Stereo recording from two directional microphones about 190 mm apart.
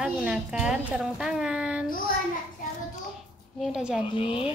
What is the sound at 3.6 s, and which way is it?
Speech, 5° right (ahead or behind).